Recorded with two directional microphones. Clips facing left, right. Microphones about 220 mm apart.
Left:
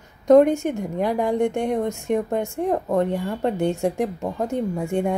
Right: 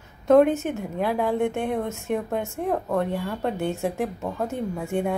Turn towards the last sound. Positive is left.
turn(degrees=15)  # may be behind; listen again after turning